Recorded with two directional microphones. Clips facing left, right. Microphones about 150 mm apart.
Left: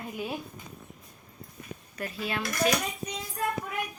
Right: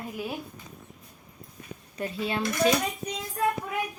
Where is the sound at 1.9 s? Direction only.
30° right (ahead or behind).